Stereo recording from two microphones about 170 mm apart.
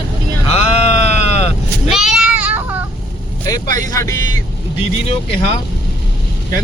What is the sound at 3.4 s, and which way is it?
Speech, 20° left (ahead or behind).